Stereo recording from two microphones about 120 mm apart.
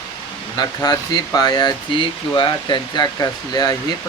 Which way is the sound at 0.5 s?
35° left (ahead or behind).